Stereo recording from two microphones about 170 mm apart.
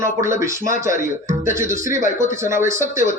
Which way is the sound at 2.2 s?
15° right (ahead or behind).